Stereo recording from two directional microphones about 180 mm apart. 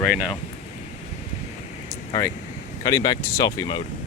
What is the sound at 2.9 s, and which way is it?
Speech, 20° left (ahead or behind).